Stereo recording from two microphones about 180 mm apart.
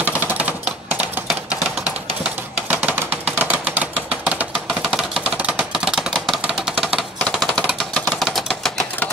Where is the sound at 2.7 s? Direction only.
10° right (ahead or behind).